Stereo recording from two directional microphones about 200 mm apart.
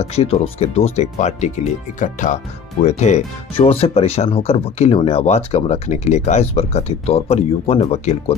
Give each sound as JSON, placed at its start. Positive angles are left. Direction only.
{"t": 0.0, "sound": "speech", "side_deg": 30}